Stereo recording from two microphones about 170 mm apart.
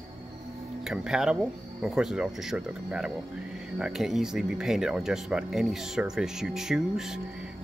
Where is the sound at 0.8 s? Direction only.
5° right (ahead or behind).